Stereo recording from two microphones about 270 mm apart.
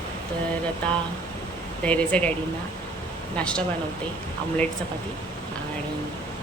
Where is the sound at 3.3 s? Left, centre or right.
Centre.